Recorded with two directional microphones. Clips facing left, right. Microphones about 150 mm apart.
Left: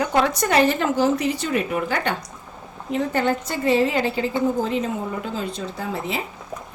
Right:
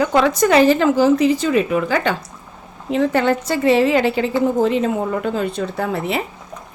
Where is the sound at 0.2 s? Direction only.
90° right; by 6.2 s 65° right (ahead or behind).